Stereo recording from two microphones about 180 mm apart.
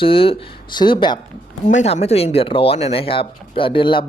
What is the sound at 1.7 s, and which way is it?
Speech, 35° left (ahead or behind).